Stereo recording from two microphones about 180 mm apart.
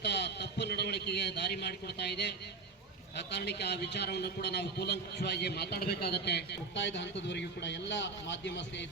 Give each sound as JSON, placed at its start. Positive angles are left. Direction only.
{"t": 0.0, "sound": "a man's voice", "side_deg": 70}